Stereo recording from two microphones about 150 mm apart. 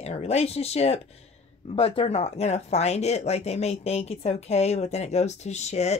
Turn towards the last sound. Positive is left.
turn(degrees=45)  # may be behind; listen again after turning